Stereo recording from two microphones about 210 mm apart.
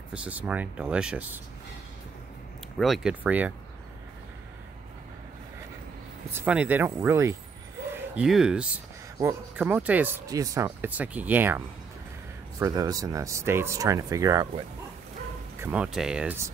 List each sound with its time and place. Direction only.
0.1 s speech: 5° right (ahead or behind)
2.8 s speech: centre (ahead or behind)
6.3 s speech: 5° right (ahead or behind)
15.6 s speech: 5° right (ahead or behind)